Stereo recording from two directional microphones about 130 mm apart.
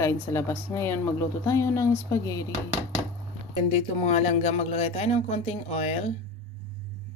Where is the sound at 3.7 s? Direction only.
55° left (ahead or behind).